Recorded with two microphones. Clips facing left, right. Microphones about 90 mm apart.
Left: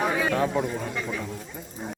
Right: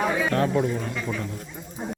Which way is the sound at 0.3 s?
5° left (ahead or behind).